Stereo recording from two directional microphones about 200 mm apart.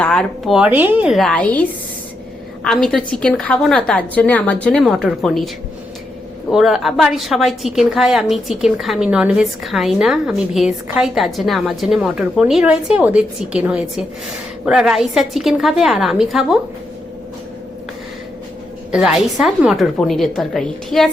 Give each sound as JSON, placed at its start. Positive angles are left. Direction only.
{"t": 0.0, "sound": "a woman's voice", "side_deg": 5}
{"t": 2.6, "sound": "a woman's voice", "side_deg": 0}
{"t": 6.5, "sound": "a woman's voice", "side_deg": 0}
{"t": 18.9, "sound": "a woman's voice", "side_deg": -5}